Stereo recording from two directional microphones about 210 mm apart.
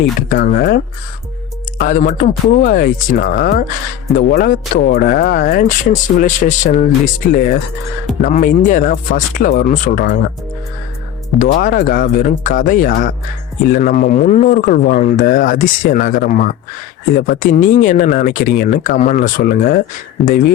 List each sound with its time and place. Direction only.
0.3 s speech: 40° left (ahead or behind)
1.8 s speech: 40° left (ahead or behind)
11.3 s speech: 40° left (ahead or behind)